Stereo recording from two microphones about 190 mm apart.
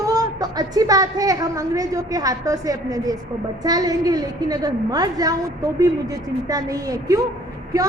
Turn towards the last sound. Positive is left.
turn(degrees=-20)  # may be behind; listen again after turning